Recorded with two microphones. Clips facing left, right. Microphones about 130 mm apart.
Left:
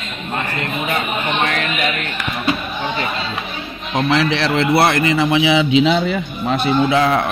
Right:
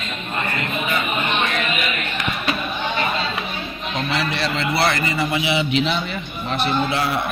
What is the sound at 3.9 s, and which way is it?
A man's voice, 90° left.